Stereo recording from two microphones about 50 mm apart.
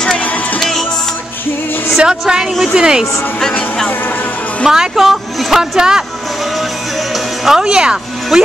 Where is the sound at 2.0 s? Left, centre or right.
Centre.